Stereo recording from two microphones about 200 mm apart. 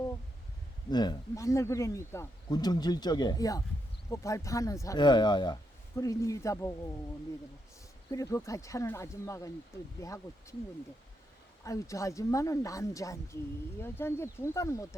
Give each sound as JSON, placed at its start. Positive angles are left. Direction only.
{"t": 0.9, "sound": "speech", "side_deg": 20}
{"t": 8.1, "sound": "speech", "side_deg": 15}
{"t": 11.6, "sound": "speech", "side_deg": 15}